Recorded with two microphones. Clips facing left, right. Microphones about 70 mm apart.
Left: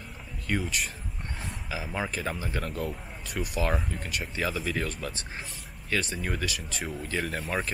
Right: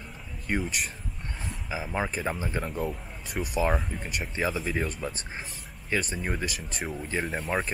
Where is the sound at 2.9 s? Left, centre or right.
Centre.